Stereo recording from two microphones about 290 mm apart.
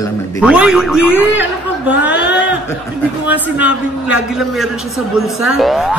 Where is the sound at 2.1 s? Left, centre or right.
Left.